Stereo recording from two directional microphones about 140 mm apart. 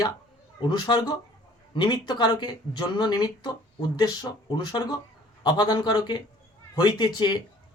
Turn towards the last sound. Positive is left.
turn(degrees=30)  # may be behind; listen again after turning